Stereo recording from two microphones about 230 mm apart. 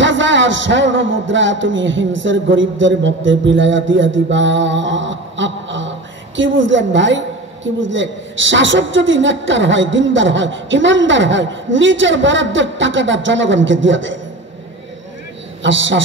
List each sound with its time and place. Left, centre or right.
0.0 s a man's voice: right
15.6 s a woman's voice: right